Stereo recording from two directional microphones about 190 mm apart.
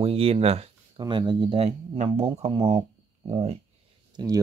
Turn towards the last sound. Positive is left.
turn(degrees=-20)  # may be behind; listen again after turning